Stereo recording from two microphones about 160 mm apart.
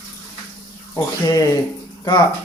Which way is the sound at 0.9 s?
20° left (ahead or behind).